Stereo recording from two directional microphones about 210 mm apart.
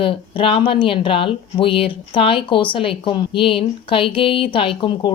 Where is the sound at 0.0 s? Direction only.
25° left (ahead or behind).